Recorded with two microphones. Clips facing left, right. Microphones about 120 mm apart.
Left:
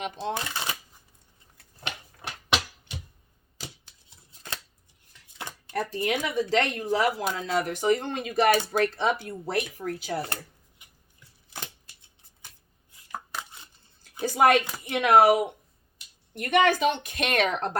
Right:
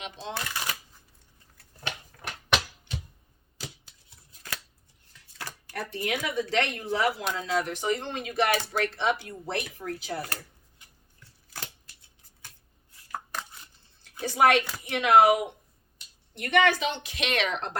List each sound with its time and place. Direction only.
0.0 s speech: 50° left (ahead or behind)
0.3 s speech: 25° left (ahead or behind)
4.1 s shuffling cards: 25° left (ahead or behind)
5.4 s a sound: 20° left (ahead or behind)
5.9 s speech: 35° left (ahead or behind)
10.8 s a sound: 15° left (ahead or behind)
13.1 s chopping: 15° left (ahead or behind)
14.2 s a sound: 40° left (ahead or behind)
14.8 s speech: 50° left (ahead or behind)